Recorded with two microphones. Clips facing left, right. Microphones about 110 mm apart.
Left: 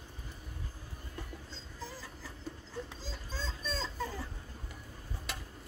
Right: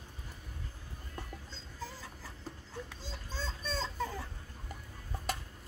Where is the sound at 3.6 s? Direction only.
20° right (ahead or behind).